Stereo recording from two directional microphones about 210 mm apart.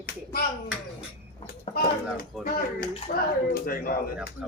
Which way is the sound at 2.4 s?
45° left (ahead or behind).